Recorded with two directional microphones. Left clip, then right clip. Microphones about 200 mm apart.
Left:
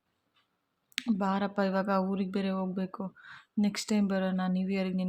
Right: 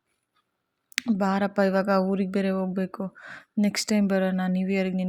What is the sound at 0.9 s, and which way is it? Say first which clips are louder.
Speech: right 6 dB; 25° right (ahead or behind).